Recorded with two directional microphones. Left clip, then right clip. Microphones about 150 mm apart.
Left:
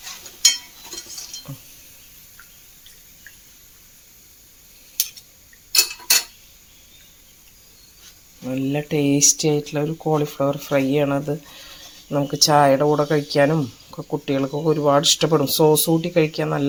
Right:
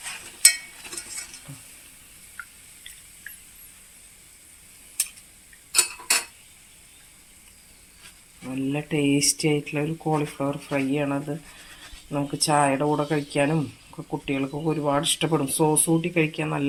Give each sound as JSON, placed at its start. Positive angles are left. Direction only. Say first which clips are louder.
{"t": 8.5, "sound": "speech", "louder": "left 4 dB", "side_deg": 55}
{"t": 9.1, "sound": "speech", "louder": "left 5 dB", "side_deg": 25}
{"t": 10.2, "sound": "speech", "louder": "left 6 dB", "side_deg": 40}
{"t": 12.1, "sound": "speech", "louder": "left 6 dB", "side_deg": 45}